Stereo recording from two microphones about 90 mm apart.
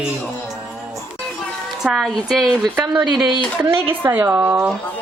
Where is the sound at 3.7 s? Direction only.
25° right (ahead or behind).